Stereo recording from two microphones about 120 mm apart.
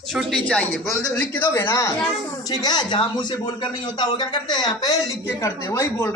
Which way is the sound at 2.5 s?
35° left (ahead or behind).